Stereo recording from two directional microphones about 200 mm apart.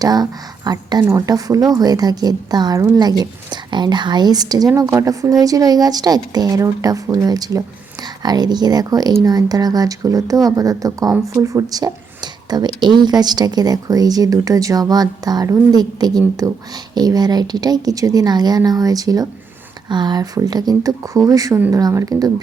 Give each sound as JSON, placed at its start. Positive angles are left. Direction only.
{"t": 0.0, "sound": "a woman's voice", "side_deg": -20}